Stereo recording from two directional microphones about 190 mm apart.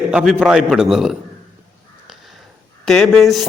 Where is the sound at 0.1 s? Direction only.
5° right (ahead or behind).